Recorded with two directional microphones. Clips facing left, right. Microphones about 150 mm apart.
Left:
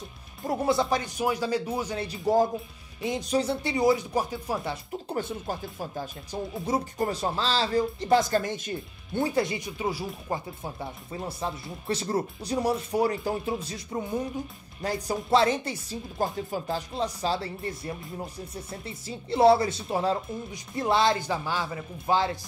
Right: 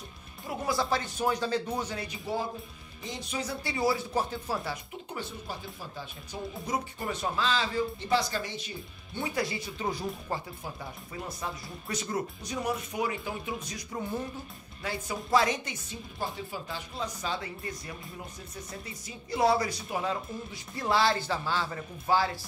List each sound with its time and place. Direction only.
0.7 s speech: 20° left (ahead or behind)
2.0 s speech: 40° left (ahead or behind)
3.6 s speech: 20° left (ahead or behind)
5.1 s speech: 45° left (ahead or behind)
7.0 s speech: 35° left (ahead or behind); by 9.2 s 50° left (ahead or behind)
9.2 s speech: 25° left (ahead or behind); by 10.4 s 10° left (ahead or behind)
10.6 s speech: 30° left (ahead or behind)
14.8 s speech: 40° left (ahead or behind); by 22.4 s 20° left (ahead or behind)